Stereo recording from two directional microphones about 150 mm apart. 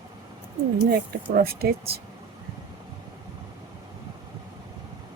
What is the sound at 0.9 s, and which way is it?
Speech, 90° right.